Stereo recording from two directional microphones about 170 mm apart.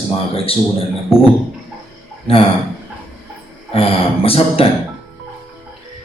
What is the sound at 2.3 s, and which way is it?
Speech, 35° left (ahead or behind).